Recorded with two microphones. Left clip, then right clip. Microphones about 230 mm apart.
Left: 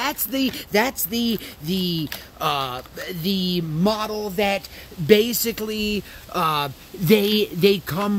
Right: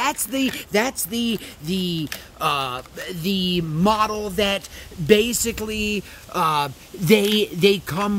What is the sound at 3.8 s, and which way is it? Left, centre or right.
Speech, right.